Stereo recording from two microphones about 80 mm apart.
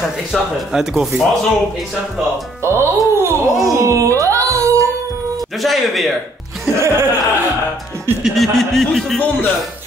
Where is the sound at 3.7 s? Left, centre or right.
Right.